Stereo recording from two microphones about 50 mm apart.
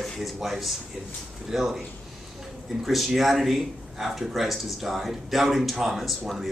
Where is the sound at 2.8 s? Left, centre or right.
Centre.